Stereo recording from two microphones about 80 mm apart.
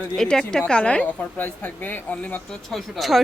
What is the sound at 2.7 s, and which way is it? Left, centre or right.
Speech, centre.